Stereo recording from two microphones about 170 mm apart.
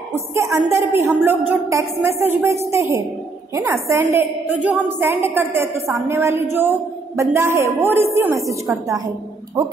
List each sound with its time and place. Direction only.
0.1 s a woman's voice: 15° right (ahead or behind)